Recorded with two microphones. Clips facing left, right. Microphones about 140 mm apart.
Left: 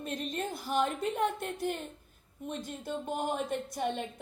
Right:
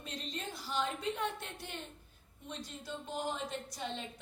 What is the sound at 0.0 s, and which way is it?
A woman's voice, 50° left (ahead or behind).